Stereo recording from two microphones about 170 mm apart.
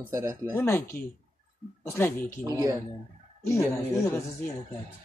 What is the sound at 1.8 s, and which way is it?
Speech, 15° left (ahead or behind).